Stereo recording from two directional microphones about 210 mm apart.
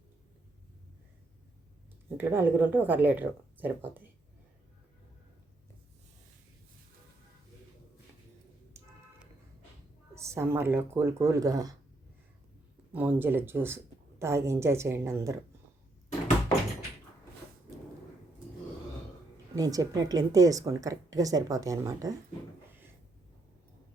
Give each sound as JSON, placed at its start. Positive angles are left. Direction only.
{"t": 2.1, "sound": "a woman's voice", "side_deg": -10}
{"t": 10.2, "sound": "a woman's voice", "side_deg": -15}
{"t": 12.9, "sound": "a woman's voice", "side_deg": -10}
{"t": 19.5, "sound": "a woman's voice", "side_deg": -15}